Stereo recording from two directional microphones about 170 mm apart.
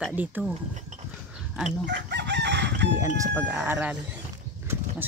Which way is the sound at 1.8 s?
90° right.